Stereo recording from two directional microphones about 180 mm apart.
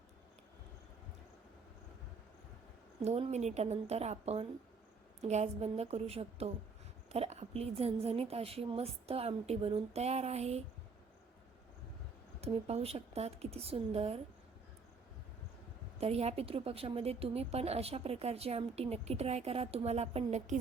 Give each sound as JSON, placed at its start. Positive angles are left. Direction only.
{"t": 3.0, "sound": "a woman's voice", "side_deg": -35}
{"t": 12.4, "sound": "a woman's voice", "side_deg": -35}
{"t": 16.0, "sound": "a woman's voice", "side_deg": -35}